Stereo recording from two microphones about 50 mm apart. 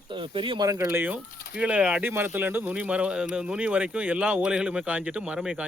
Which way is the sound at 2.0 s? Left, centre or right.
Right.